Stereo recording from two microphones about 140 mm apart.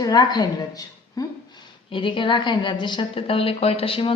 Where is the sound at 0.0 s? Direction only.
30° left (ahead or behind).